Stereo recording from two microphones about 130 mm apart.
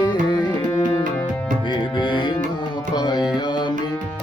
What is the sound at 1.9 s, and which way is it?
Music, 35° left (ahead or behind).